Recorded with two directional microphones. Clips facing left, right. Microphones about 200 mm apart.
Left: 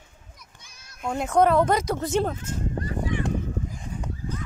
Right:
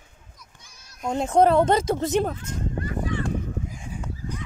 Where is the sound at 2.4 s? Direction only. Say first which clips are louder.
Even; 35° left (ahead or behind).